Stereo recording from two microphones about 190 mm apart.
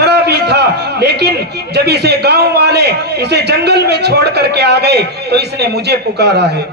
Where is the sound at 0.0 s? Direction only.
60° right (ahead or behind).